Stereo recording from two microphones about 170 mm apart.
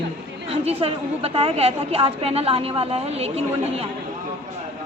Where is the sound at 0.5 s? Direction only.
35° right (ahead or behind).